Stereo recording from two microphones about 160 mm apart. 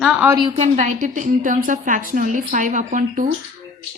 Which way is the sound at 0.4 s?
40° right (ahead or behind).